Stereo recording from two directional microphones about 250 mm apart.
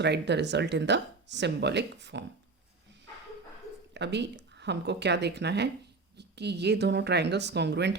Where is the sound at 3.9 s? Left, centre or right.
Right.